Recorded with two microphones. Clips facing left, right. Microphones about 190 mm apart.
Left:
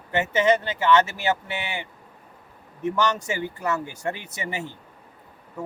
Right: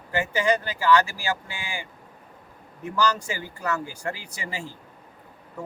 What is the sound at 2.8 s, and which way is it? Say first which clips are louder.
Speech: left 1 dB; 25° left (ahead or behind).